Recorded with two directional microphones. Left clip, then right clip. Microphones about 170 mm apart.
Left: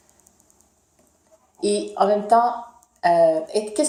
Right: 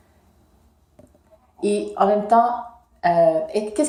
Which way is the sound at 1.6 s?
30° left (ahead or behind).